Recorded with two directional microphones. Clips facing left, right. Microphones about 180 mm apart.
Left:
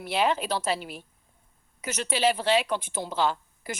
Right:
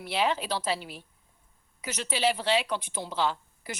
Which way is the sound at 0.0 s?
50° left (ahead or behind).